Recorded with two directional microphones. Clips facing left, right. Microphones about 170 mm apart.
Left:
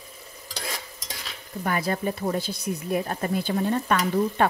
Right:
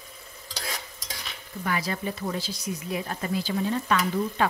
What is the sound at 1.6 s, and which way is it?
Speech, 50° left (ahead or behind).